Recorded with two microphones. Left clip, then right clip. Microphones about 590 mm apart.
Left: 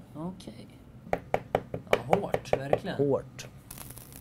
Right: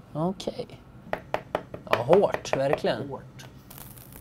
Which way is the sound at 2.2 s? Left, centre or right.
Right.